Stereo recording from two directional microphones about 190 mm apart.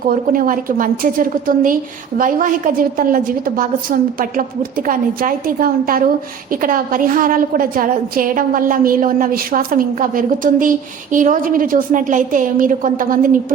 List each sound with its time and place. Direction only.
0.1 s a woman's voice: 45° right (ahead or behind)